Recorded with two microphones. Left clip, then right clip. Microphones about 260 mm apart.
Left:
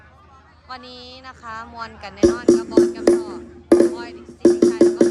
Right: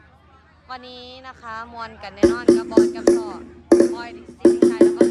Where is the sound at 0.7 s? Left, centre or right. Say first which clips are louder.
Even; centre.